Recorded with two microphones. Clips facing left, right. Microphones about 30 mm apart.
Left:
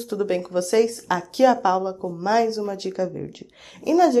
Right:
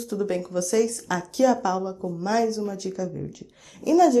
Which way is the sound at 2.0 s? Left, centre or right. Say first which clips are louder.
Left 3 dB; left.